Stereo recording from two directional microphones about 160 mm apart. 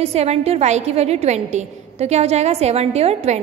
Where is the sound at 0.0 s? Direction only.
40° right (ahead or behind).